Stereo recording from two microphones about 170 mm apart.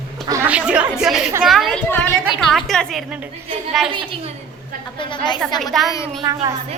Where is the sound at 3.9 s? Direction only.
30° right (ahead or behind).